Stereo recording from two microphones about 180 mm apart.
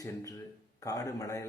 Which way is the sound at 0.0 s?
20° left (ahead or behind).